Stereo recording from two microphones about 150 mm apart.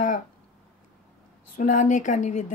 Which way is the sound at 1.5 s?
55° left (ahead or behind).